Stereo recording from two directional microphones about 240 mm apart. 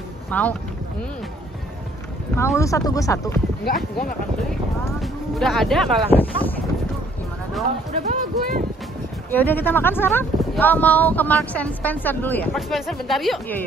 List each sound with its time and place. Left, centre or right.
0.3 s speech: centre
2.3 s speech: centre
5.0 s speech: centre
8.0 s speech: right
9.3 s speech: centre